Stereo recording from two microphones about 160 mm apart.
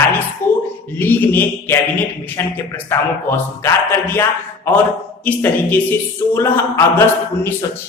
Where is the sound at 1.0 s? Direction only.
10° left (ahead or behind).